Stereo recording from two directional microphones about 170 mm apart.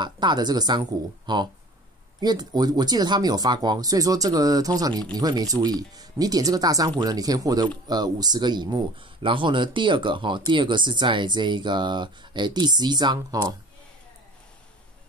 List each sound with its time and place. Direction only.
0.0 s speech: 25° right (ahead or behind)